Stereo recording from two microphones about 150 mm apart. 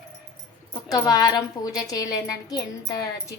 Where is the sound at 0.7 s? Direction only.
25° left (ahead or behind).